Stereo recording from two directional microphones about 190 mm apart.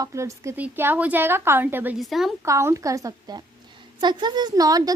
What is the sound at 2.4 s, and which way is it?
A woman's voice, 15° right (ahead or behind).